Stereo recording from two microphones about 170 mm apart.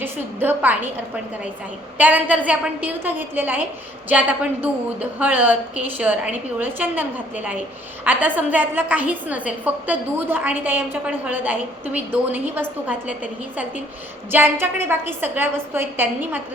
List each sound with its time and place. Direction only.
0.0 s a woman's voice: 10° right (ahead or behind)
2.0 s a woman's voice: 10° right (ahead or behind)
14.3 s a woman's voice: 10° right (ahead or behind)